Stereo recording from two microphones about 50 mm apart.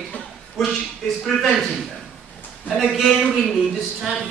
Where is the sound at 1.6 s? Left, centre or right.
Centre.